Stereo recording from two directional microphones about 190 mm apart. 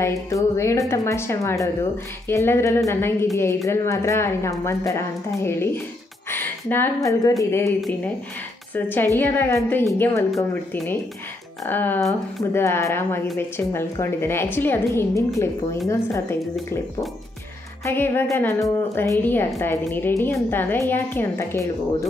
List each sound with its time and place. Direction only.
0.0 s a woman's voice: 15° left (ahead or behind)
8.7 s a woman's voice: 10° left (ahead or behind)
16.3 s speech: centre (ahead or behind)
17.8 s a woman's voice: 10° left (ahead or behind)